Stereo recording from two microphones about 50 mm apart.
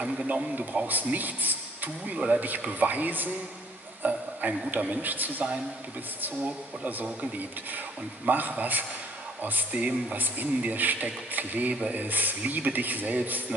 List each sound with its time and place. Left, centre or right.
0.0 s a man's voice: right
2.1 s speech: right
2.7 s a man's voice: right